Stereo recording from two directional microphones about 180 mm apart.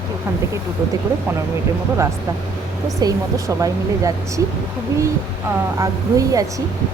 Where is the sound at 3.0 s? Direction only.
20° right (ahead or behind).